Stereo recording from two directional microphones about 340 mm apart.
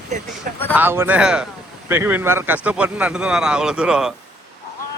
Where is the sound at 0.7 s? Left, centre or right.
Centre.